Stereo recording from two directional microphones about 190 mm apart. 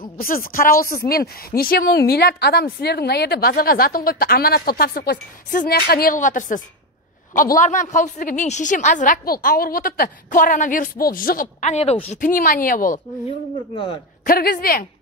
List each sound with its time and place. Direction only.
0.0 s speech: 50° left (ahead or behind)
14.2 s speech: 50° left (ahead or behind)